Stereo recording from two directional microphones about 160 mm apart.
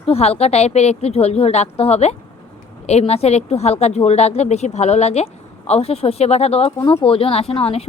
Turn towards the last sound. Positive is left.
turn(degrees=40)  # may be behind; listen again after turning